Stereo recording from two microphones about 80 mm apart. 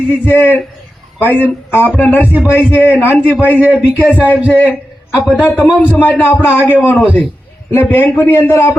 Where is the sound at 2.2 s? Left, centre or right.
Centre.